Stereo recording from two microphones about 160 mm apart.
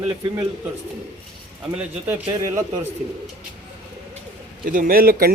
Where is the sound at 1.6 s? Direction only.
10° right (ahead or behind).